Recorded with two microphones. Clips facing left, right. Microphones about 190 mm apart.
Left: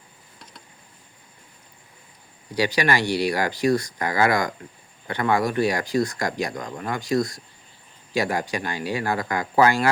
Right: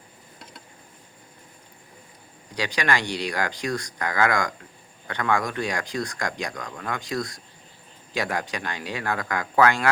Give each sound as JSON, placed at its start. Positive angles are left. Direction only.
{"t": 2.6, "sound": "speech", "side_deg": 5}
{"t": 6.5, "sound": "speech", "side_deg": 25}
{"t": 6.9, "sound": "speech", "side_deg": 0}